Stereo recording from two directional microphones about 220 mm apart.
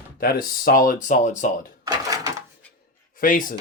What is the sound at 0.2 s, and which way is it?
Speech, 40° left (ahead or behind).